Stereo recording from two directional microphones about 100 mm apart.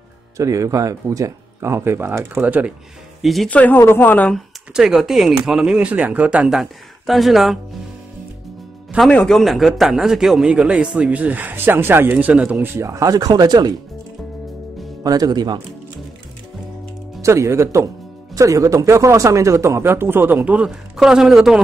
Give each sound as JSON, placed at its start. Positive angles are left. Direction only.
{"t": 0.4, "sound": "speech", "side_deg": -30}
{"t": 3.2, "sound": "speech", "side_deg": 0}
{"t": 3.4, "sound": "speech", "side_deg": 15}
{"t": 4.7, "sound": "speech", "side_deg": -5}
{"t": 9.1, "sound": "a man's voice", "side_deg": 5}
{"t": 15.0, "sound": "speech", "side_deg": -40}
{"t": 17.2, "sound": "speech", "side_deg": -30}